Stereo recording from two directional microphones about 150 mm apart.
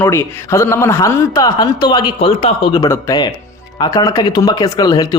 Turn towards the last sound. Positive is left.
turn(degrees=25)  # may be behind; listen again after turning